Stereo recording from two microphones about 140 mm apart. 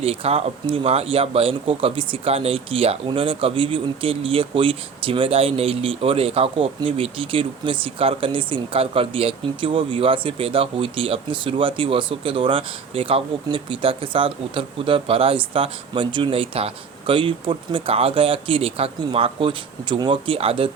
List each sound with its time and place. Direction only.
0.0 s speech: 45° right (ahead or behind)